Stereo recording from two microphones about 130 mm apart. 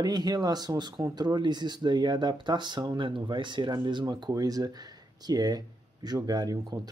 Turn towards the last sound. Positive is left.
turn(degrees=-30)  # may be behind; listen again after turning